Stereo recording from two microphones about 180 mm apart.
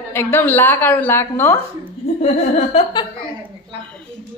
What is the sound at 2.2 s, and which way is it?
Laughter, 35° left (ahead or behind).